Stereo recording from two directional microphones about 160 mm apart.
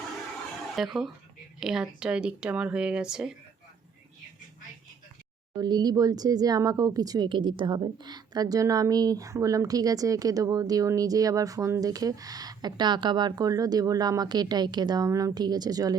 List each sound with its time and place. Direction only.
0.8 s speech: centre (ahead or behind)
5.5 s speech: 25° right (ahead or behind)